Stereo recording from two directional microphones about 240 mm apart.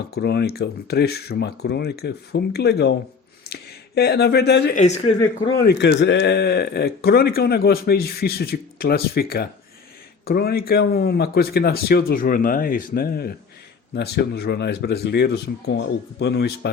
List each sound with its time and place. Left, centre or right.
0.1 s speech: left
4.8 s speech: left
5.6 s speech: left